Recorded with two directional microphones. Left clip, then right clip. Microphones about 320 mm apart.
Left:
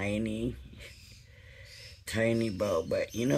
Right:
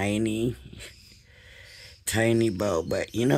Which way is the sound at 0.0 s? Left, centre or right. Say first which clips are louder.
Right 7 dB; right.